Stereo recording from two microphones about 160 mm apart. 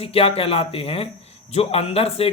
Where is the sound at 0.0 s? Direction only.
35° left (ahead or behind).